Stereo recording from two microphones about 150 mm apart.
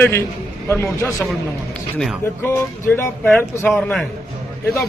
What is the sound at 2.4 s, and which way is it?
Speech, 15° left (ahead or behind).